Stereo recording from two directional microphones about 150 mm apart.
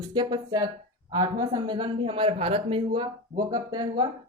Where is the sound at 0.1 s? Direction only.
30° right (ahead or behind).